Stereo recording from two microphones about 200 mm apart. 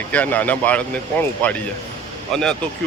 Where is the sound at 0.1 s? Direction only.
5° left (ahead or behind).